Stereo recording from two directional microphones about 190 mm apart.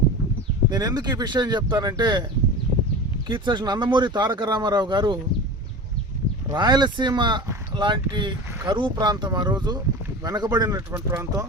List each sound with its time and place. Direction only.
0.7 s speech: 20° right (ahead or behind)
3.2 s speech: 25° right (ahead or behind)
6.5 s speech: 25° right (ahead or behind)